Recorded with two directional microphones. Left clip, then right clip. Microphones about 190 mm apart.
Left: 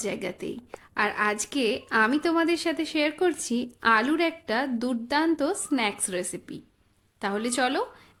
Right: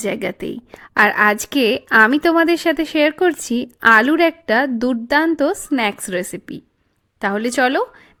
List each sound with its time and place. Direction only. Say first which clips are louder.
0.0 s a woman's voice: right 9 dB; 35° right (ahead or behind)